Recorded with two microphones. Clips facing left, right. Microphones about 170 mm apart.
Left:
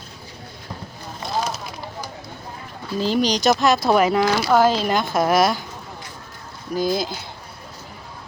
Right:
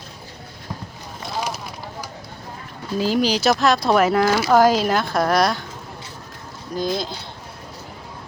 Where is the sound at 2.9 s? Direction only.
5° right (ahead or behind).